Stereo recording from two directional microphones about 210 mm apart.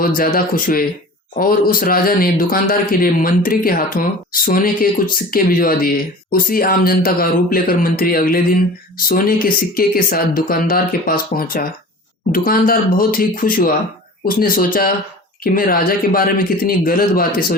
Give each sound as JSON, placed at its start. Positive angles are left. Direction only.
{"t": 0.0, "sound": "speech", "side_deg": 45}